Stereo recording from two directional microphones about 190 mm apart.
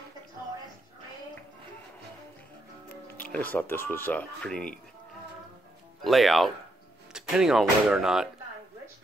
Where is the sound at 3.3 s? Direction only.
10° left (ahead or behind).